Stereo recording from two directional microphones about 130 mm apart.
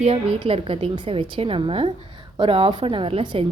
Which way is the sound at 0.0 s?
50° right (ahead or behind).